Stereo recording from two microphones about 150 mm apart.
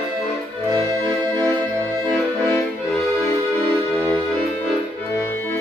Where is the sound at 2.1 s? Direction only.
5° left (ahead or behind).